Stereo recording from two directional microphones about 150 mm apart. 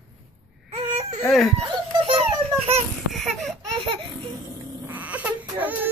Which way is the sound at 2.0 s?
40° right (ahead or behind).